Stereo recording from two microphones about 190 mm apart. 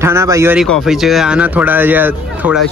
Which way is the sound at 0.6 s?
Centre (ahead or behind).